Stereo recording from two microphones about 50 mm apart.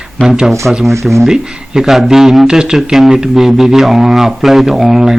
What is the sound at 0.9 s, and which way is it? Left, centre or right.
Speech, right.